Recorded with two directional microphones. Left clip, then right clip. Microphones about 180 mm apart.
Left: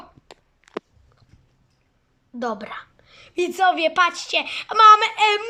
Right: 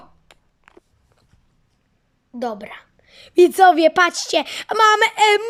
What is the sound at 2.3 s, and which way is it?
A woman's voice, 10° right (ahead or behind).